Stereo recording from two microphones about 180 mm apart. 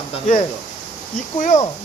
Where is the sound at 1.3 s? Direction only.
45° left (ahead or behind).